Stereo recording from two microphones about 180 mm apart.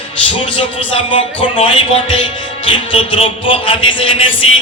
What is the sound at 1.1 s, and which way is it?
Music, 30° left (ahead or behind).